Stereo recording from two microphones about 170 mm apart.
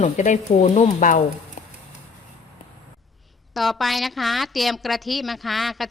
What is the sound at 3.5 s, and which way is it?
A woman's voice, centre (ahead or behind).